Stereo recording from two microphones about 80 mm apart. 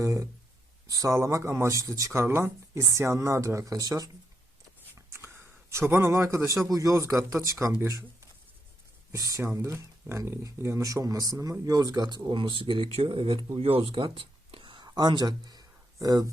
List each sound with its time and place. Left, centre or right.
0.0 s speech: right
4.9 s a sound: right
6.7 s speech: right
9.1 s speech: right
12.3 s speech: right
13.8 s a sound: right